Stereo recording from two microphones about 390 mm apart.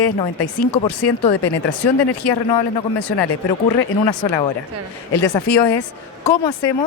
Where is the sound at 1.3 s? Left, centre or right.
Left.